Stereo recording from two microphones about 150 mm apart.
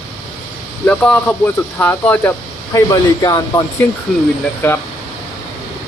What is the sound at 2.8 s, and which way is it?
Speech, 25° left (ahead or behind).